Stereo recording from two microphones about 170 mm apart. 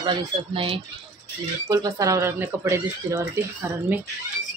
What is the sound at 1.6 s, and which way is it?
Speech, 20° right (ahead or behind).